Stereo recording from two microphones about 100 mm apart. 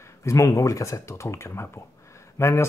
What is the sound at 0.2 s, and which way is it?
Speech, 30° left (ahead or behind).